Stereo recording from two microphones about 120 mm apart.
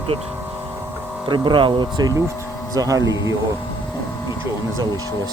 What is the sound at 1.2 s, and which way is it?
Speech, 40° right (ahead or behind).